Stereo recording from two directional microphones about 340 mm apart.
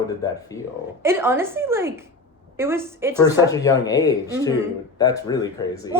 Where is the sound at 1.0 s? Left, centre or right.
Centre.